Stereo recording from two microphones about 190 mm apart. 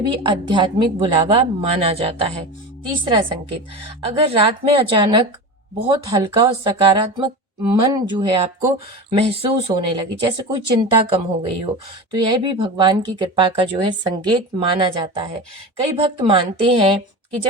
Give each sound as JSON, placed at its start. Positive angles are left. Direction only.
{"t": 0.0, "sound": "speech", "side_deg": -25}